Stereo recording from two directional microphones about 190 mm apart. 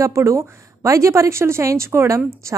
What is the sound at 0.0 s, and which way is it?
A woman's voice, 15° right (ahead or behind).